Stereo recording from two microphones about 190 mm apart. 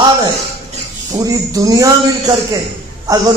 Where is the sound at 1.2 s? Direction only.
20° right (ahead or behind).